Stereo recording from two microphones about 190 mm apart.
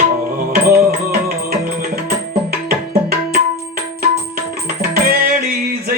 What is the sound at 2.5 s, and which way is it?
Tabla, 50° right (ahead or behind).